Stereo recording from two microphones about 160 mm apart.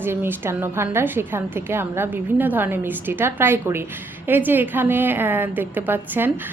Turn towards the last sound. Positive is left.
turn(degrees=-10)  # may be behind; listen again after turning